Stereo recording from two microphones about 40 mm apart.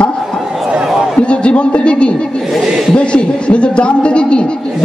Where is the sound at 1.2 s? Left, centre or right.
Left.